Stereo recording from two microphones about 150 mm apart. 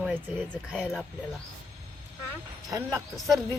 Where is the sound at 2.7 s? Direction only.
20° right (ahead or behind).